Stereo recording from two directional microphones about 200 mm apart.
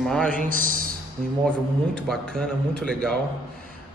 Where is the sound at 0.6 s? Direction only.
45° right (ahead or behind).